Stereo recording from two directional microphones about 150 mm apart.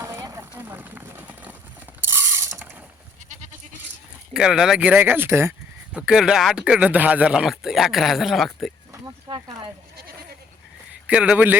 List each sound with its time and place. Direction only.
0.0 s a sound: 20° right (ahead or behind)
2.0 s ratchet: 15° right (ahead or behind)
4.4 s speech: 5° right (ahead or behind)
8.9 s a sound: 25° right (ahead or behind)
10.0 s goat: 90° right
11.0 s a man's voice: 5° right (ahead or behind)